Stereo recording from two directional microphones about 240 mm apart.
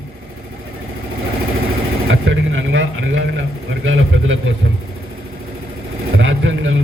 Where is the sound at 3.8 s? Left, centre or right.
Right.